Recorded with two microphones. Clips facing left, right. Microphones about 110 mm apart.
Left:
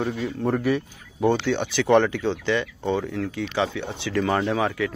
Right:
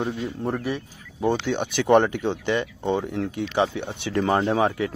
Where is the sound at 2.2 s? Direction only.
20° right (ahead or behind).